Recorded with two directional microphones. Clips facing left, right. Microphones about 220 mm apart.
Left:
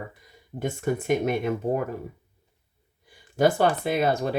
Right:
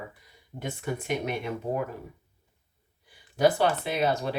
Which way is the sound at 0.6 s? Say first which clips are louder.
Left 6 dB; 45° left (ahead or behind).